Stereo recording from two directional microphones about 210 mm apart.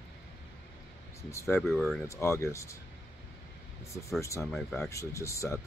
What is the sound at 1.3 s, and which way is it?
Speech, 10° left (ahead or behind).